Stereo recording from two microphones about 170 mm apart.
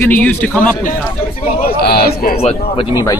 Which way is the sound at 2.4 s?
35° left (ahead or behind).